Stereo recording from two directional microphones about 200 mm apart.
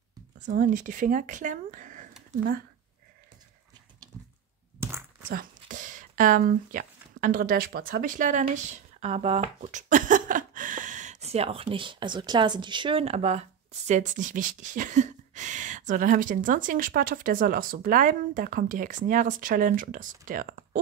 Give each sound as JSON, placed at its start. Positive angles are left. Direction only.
{"t": 0.5, "sound": "speech", "side_deg": -40}
{"t": 5.3, "sound": "speech", "side_deg": -40}